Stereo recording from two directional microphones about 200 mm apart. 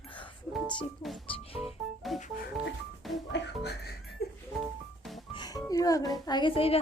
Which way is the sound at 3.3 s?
55° left (ahead or behind).